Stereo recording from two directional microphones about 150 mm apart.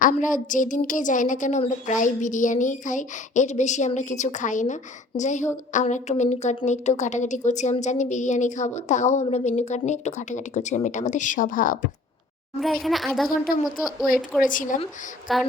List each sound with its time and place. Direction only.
0.0 s a woman's voice: 60° left (ahead or behind)
12.5 s speech: centre (ahead or behind)
14.4 s a woman's voice: 60° left (ahead or behind)
15.3 s speech: centre (ahead or behind)